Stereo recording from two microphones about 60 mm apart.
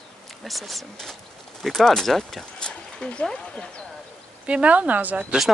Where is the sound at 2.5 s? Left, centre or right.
Centre.